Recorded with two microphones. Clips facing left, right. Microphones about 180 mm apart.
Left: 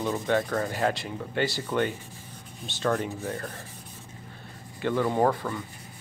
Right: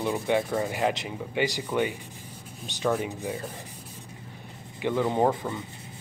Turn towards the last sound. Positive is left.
turn(degrees=-20)  # may be behind; listen again after turning